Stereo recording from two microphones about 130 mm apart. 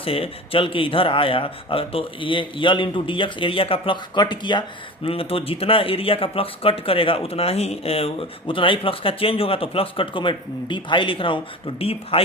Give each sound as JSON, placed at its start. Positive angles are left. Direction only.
{"t": 0.0, "sound": "speech", "side_deg": 45}